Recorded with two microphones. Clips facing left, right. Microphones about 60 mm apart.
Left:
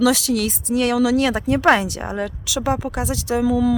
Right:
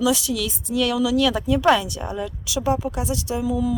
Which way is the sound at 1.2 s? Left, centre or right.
Left.